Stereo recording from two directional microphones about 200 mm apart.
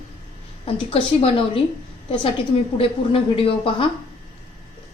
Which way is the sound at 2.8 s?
30° left (ahead or behind).